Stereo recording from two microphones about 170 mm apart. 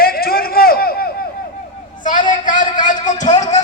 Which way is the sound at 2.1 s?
50° left (ahead or behind).